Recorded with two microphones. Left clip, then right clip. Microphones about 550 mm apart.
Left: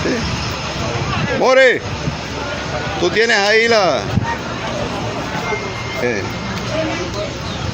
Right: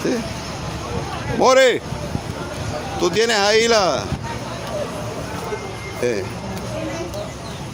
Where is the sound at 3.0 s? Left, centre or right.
Right.